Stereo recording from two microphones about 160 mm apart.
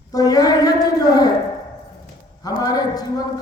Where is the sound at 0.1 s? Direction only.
20° left (ahead or behind).